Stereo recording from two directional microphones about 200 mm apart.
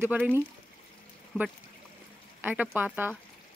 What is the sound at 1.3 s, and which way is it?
Speech, 5° left (ahead or behind).